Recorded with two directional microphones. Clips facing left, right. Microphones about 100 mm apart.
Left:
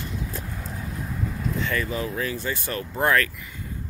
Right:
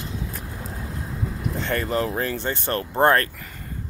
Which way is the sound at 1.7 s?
60° right (ahead or behind).